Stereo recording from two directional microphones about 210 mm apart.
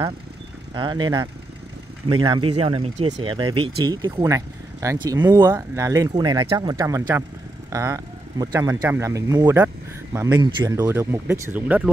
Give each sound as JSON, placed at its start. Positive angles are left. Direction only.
{"t": 0.7, "sound": "speech", "side_deg": -20}